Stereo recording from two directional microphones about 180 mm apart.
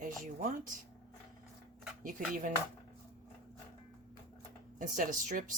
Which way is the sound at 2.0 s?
45° right (ahead or behind).